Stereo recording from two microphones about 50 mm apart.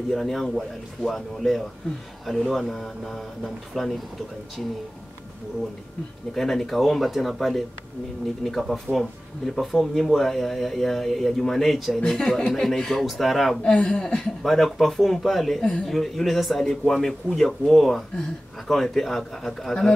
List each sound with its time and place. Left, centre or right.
0.1 s speech: centre
6.3 s speech: centre
13.6 s speech: centre
14.4 s speech: centre